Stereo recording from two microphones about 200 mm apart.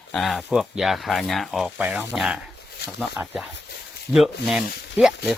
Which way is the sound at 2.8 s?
55° left (ahead or behind).